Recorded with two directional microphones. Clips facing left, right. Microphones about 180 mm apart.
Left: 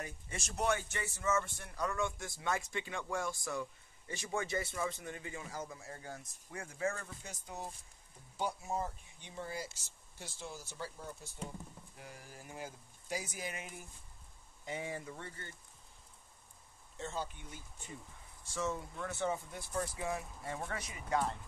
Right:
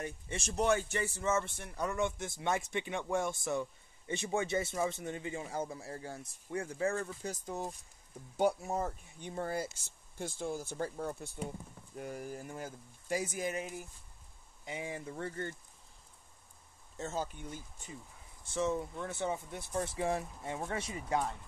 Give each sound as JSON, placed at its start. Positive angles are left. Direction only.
{"t": 0.3, "sound": "speech", "side_deg": -30}
{"t": 8.4, "sound": "speech", "side_deg": -50}
{"t": 14.7, "sound": "speech", "side_deg": -15}
{"t": 15.0, "sound": "speech", "side_deg": -45}
{"t": 17.0, "sound": "speech", "side_deg": -45}
{"t": 18.5, "sound": "speech", "side_deg": -20}
{"t": 20.4, "sound": "speech", "side_deg": -20}